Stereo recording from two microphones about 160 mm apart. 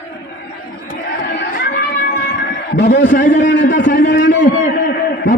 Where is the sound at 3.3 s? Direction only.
55° left (ahead or behind).